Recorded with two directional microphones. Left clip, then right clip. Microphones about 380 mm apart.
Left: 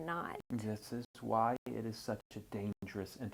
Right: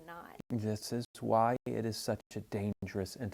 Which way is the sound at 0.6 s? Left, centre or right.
Right.